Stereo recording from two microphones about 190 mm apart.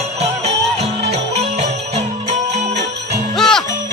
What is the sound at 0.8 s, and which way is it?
Music, 35° right (ahead or behind).